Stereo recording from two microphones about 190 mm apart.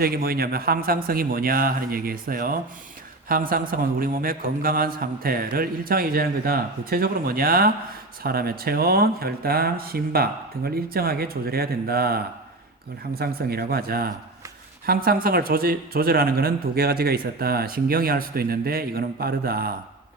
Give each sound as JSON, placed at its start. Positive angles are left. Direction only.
{"t": 0.0, "sound": "a man's voice", "side_deg": -50}